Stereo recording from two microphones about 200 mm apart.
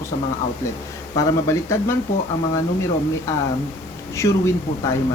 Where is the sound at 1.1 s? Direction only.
15° left (ahead or behind).